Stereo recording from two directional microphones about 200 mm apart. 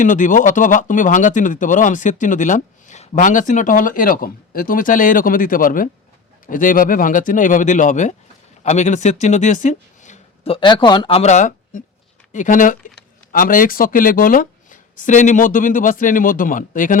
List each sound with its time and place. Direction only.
0.0 s speech: 40° left (ahead or behind)